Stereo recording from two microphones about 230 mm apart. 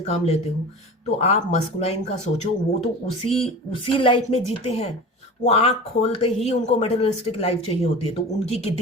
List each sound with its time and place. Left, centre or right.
0.0 s speech: left